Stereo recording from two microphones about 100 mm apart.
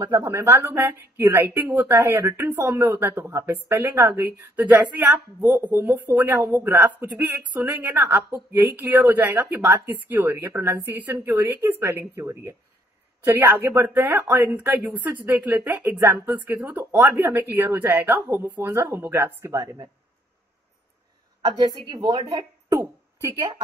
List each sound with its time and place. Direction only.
0.0 s a woman's voice: 30° right (ahead or behind)
21.4 s a woman's voice: 40° right (ahead or behind)
22.7 s a sound: 35° right (ahead or behind)